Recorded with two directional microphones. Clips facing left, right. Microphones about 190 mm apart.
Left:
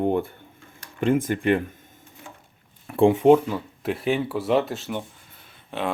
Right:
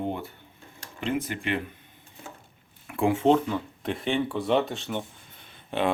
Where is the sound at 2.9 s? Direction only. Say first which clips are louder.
Left 7 dB; 30° left (ahead or behind).